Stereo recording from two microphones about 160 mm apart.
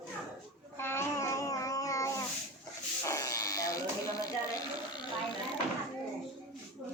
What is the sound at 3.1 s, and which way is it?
Electric shaver, 20° left (ahead or behind).